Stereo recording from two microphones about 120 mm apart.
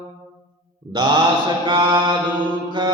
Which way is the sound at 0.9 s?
40° right (ahead or behind).